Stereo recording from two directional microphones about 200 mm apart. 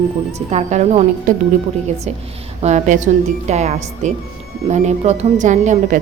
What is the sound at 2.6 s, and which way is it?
Speech, 40° right (ahead or behind).